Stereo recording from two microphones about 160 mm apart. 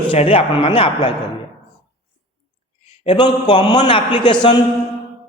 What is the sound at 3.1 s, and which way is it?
A man's voice, 30° left (ahead or behind).